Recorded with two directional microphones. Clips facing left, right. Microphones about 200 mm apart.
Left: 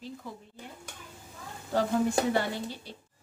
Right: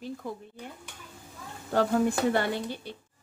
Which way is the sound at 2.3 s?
55° right (ahead or behind).